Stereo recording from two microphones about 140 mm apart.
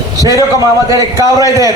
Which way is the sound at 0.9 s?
25° right (ahead or behind).